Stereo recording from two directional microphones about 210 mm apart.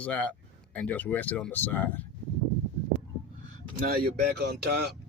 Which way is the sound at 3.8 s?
45° right (ahead or behind).